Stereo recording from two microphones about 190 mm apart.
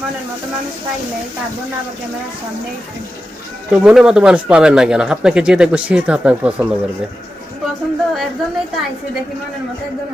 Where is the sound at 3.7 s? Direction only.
5° right (ahead or behind).